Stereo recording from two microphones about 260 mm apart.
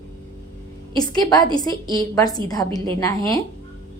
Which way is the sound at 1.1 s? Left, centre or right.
Centre.